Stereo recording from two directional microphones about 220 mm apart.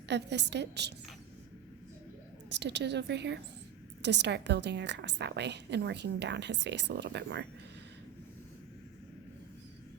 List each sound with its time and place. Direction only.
0.1 s a woman's voice: 50° right (ahead or behind)
2.5 s a woman's voice: 50° right (ahead or behind)